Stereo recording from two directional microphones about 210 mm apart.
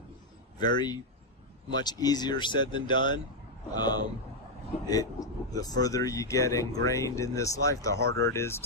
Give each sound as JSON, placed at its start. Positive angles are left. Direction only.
{"t": 0.6, "sound": "speech", "side_deg": 20}